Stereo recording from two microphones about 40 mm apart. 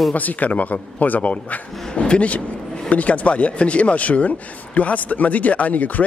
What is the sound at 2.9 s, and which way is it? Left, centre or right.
Speech, left.